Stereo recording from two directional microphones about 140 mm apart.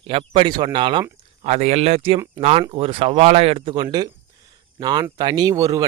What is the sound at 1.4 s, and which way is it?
Speech, 50° right (ahead or behind).